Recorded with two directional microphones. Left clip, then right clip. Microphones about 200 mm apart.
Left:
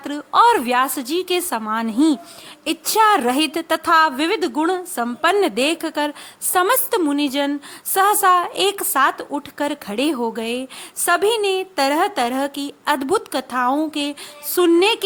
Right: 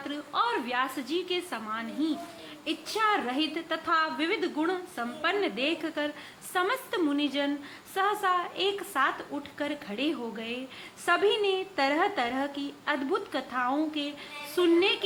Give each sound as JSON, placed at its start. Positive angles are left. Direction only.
{"t": 0.0, "sound": "a woman's voice", "side_deg": 50}